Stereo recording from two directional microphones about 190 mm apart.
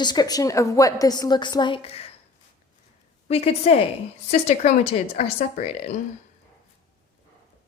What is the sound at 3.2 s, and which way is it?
Speech, 30° left (ahead or behind).